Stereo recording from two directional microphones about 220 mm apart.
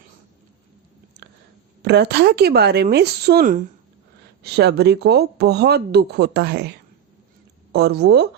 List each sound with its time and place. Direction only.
1.8 s speech: 50° right (ahead or behind)